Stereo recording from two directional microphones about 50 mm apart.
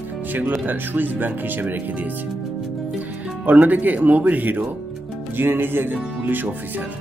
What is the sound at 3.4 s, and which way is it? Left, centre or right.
Speech, right.